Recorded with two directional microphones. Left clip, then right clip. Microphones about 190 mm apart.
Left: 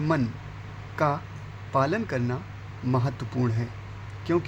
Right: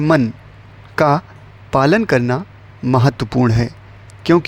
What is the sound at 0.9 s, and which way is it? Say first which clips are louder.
Speech: right 12 dB; 60° right (ahead or behind).